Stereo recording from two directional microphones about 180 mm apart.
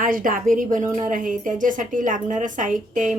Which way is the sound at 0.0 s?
50° right (ahead or behind).